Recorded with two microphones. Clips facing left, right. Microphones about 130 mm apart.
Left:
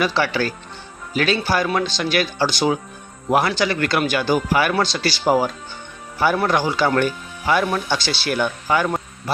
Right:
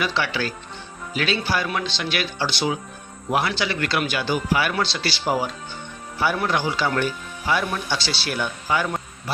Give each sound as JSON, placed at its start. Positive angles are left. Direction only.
{"t": 0.0, "sound": "speech", "side_deg": 40}